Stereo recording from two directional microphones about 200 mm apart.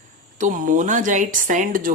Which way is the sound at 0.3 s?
40° right (ahead or behind).